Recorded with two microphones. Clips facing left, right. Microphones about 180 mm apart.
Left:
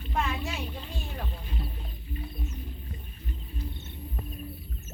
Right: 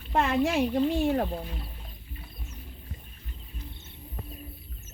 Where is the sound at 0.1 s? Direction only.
80° right.